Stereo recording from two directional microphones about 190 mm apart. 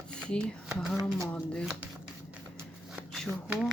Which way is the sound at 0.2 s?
5° left (ahead or behind).